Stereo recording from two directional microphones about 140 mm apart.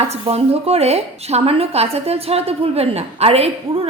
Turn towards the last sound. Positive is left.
turn(degrees=-45)  # may be behind; listen again after turning